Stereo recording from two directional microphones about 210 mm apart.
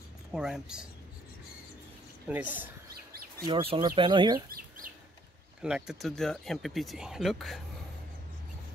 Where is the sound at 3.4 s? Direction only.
25° right (ahead or behind).